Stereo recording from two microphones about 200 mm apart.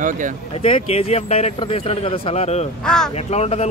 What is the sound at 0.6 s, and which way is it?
Speech, 30° left (ahead or behind).